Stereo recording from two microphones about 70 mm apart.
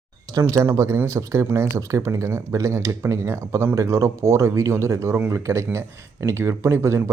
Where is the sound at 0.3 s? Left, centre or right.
Right.